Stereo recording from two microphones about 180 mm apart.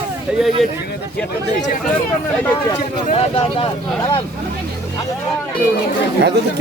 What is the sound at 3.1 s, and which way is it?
Speech, 35° left (ahead or behind).